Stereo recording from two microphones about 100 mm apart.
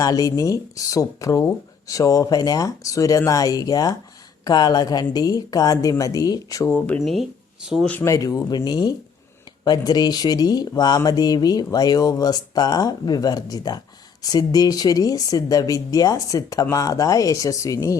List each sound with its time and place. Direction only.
0.0 s speech: 40° left (ahead or behind)
6.7 s speech: 15° left (ahead or behind)
7.0 s speech: centre (ahead or behind)
8.0 s speech: 35° left (ahead or behind)